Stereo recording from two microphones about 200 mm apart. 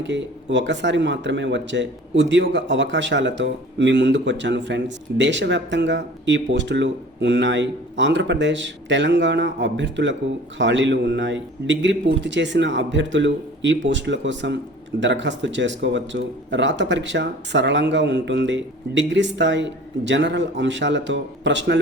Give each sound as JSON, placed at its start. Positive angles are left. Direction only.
{"t": 0.0, "sound": "speech", "side_deg": -65}